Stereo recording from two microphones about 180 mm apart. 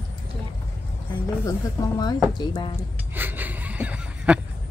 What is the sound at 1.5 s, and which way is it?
Speech, 20° left (ahead or behind).